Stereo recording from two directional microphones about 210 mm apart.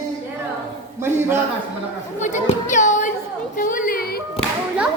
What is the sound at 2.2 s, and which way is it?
Speech, 35° left (ahead or behind).